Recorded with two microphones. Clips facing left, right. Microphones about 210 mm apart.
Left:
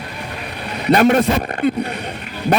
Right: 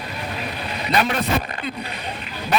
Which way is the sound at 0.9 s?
50° left (ahead or behind).